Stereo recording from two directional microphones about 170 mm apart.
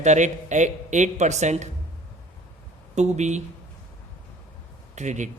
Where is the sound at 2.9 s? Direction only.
40° right (ahead or behind).